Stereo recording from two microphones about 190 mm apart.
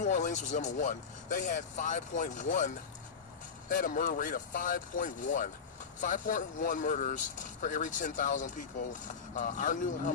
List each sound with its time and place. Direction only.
0.0 s speech: 40° left (ahead or behind)